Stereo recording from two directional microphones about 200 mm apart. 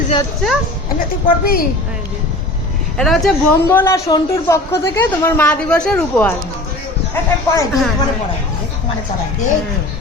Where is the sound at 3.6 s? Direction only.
15° left (ahead or behind).